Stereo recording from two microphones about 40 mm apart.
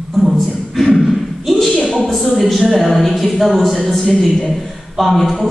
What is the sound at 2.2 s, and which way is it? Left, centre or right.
A man's voice, centre.